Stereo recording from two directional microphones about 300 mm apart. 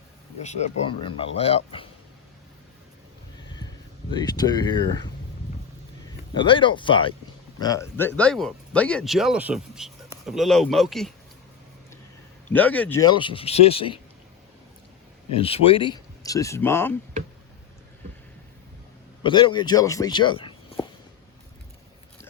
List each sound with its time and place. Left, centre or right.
1.4 s speech: centre
4.1 s speech: centre
6.3 s speech: centre
12.5 s speech: centre
15.4 s speech: centre
19.2 s speech: centre